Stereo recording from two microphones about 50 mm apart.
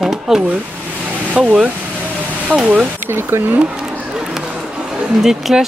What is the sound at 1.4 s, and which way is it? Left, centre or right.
Speech, centre.